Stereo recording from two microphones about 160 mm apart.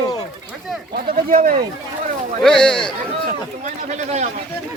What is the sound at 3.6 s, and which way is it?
Speech, 45° right (ahead or behind).